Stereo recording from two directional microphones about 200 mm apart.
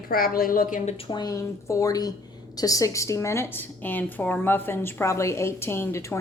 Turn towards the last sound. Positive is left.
turn(degrees=15)  # may be behind; listen again after turning